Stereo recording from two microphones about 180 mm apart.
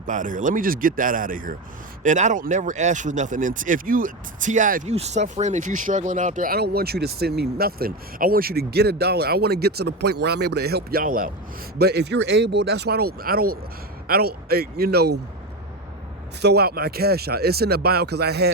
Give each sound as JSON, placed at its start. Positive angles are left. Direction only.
{"t": 0.1, "sound": "speech", "side_deg": -45}
{"t": 11.8, "sound": "speech", "side_deg": -65}
{"t": 16.4, "sound": "speech", "side_deg": -65}